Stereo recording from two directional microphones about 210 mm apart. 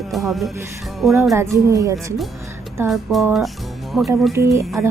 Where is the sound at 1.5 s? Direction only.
15° right (ahead or behind).